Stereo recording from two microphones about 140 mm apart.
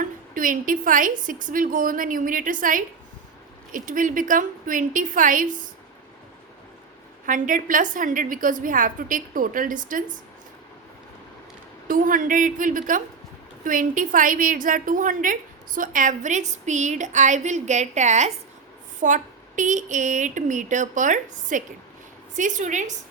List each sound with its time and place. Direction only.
0.0 s a woman's voice: 75° right (ahead or behind)
7.3 s a woman's voice: 70° right (ahead or behind)
11.9 s a woman's voice: 75° right (ahead or behind)